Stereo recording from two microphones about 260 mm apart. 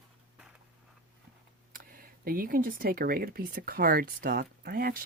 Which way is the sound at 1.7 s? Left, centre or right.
Right.